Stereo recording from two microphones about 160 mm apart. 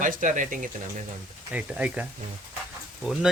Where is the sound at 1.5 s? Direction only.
10° right (ahead or behind).